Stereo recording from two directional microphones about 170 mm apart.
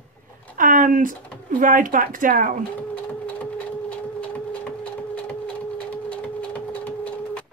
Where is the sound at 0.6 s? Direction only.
55° right (ahead or behind).